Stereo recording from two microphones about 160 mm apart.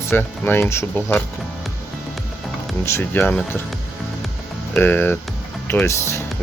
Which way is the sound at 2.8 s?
15° left (ahead or behind).